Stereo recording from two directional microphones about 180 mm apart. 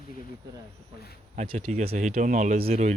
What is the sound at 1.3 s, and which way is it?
Speech, 30° right (ahead or behind).